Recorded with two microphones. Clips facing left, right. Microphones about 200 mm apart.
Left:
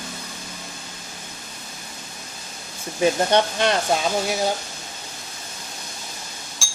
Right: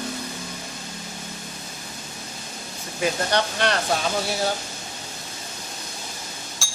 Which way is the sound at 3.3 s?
20° left (ahead or behind).